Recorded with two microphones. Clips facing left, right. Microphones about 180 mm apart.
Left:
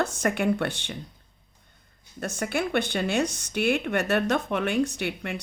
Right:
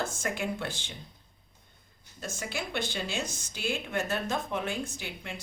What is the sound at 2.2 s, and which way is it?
Speech, 60° left (ahead or behind).